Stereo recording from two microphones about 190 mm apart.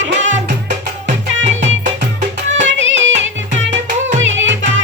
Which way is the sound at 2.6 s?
75° right (ahead or behind).